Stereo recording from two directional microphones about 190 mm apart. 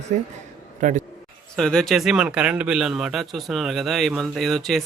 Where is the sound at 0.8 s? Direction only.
40° right (ahead or behind).